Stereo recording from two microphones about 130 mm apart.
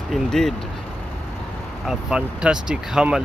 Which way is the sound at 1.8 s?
5° right (ahead or behind).